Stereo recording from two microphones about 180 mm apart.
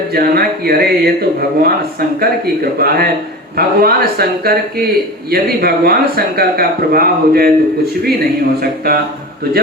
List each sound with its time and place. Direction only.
0.1 s speech: 60° right (ahead or behind)
8.6 s speech: 55° right (ahead or behind)